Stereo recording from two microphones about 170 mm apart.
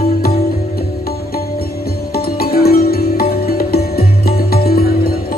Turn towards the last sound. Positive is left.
turn(degrees=60)  # may be behind; listen again after turning